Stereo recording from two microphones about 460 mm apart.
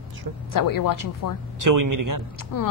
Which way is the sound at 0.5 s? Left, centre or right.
Left.